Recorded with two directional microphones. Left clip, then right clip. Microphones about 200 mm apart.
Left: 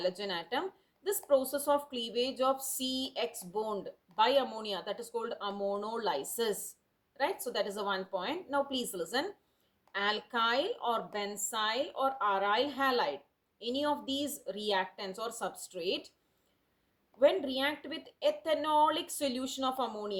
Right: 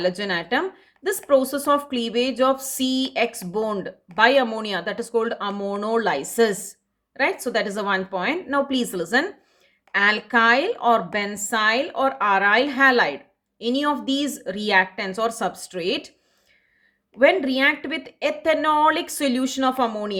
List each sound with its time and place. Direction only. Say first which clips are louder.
0.0 s a woman's voice: right 11 dB; 25° right (ahead or behind)
17.2 s a woman's voice: right 10 dB; 25° right (ahead or behind)